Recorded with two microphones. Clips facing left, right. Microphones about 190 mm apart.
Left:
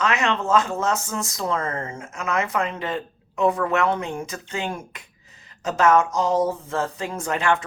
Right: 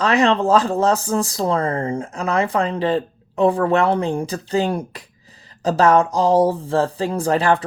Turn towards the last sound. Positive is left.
turn(degrees=-35)  # may be behind; listen again after turning